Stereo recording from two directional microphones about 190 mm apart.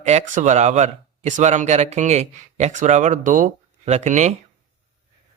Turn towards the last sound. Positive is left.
turn(degrees=-40)  # may be behind; listen again after turning